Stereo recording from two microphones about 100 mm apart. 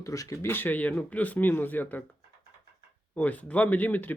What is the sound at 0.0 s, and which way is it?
Speech, 35° left (ahead or behind).